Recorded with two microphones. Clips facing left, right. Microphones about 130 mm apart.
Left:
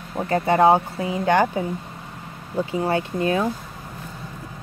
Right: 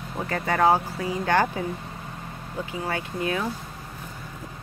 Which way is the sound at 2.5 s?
30° left (ahead or behind).